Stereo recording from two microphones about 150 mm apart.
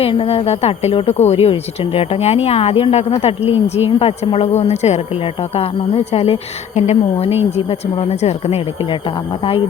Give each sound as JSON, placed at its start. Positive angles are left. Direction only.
{"t": 0.0, "sound": "a woman's voice", "side_deg": 40}
{"t": 6.7, "sound": "a woman's voice", "side_deg": 50}